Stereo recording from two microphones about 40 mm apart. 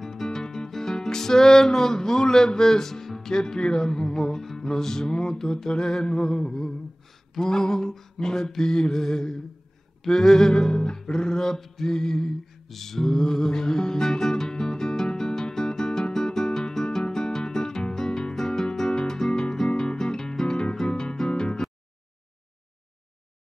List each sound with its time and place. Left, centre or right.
0.0 s music: centre